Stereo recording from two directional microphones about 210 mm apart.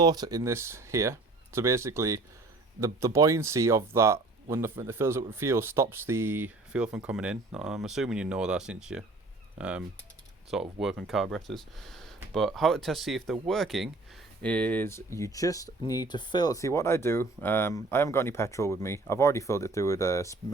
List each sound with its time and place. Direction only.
0.0 s speech: 20° right (ahead or behind); by 20.4 s 15° left (ahead or behind)